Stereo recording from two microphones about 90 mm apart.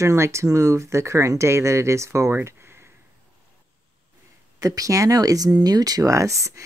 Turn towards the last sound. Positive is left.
turn(degrees=-35)  # may be behind; listen again after turning